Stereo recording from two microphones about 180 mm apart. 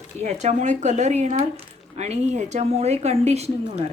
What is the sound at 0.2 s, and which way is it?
Speech, 40° right (ahead or behind).